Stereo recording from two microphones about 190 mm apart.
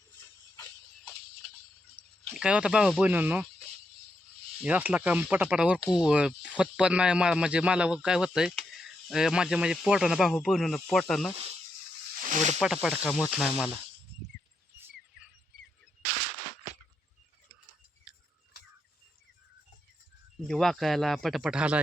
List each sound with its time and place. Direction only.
0.5 s music: 10° left (ahead or behind)
2.0 s speech: 5° right (ahead or behind)
4.6 s speech: 10° right (ahead or behind)
12.1 s snake: 40° right (ahead or behind)
12.5 s speech: centre (ahead or behind)
18.1 s a sound: 5° right (ahead or behind)
20.5 s speech: centre (ahead or behind)